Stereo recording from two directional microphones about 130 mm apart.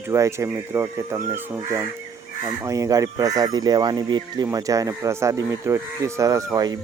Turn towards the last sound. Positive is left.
turn(degrees=-25)  # may be behind; listen again after turning